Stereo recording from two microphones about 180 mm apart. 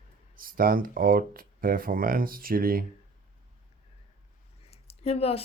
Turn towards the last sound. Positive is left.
turn(degrees=35)  # may be behind; listen again after turning